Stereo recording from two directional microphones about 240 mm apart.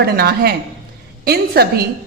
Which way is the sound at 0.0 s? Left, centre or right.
Right.